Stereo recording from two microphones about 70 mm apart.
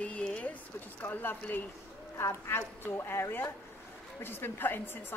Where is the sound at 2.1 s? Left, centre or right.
Left.